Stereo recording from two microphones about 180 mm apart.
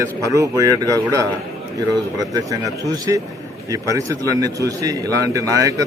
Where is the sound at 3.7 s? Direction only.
20° right (ahead or behind).